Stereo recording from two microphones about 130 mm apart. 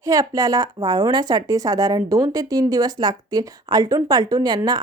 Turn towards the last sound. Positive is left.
turn(degrees=-30)  # may be behind; listen again after turning